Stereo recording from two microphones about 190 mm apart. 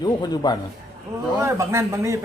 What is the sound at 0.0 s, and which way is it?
Speech, 20° left (ahead or behind).